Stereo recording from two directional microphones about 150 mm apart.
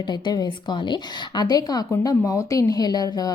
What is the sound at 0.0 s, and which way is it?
A woman's voice, 30° left (ahead or behind).